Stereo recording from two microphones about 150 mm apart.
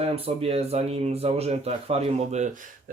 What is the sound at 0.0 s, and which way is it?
Speech, 40° right (ahead or behind).